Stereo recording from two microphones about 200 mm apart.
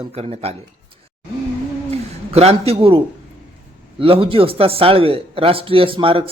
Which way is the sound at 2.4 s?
30° right (ahead or behind).